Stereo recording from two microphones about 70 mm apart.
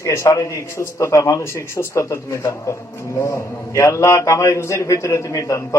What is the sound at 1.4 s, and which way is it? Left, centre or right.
A man's voice, left.